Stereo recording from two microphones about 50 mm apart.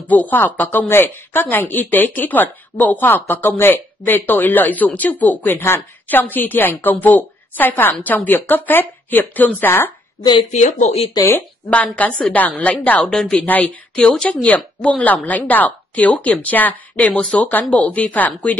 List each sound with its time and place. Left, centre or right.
0.1 s a woman's voice: left
11.7 s a woman's voice: left
13.0 s a woman's voice: centre
14.4 s speech: left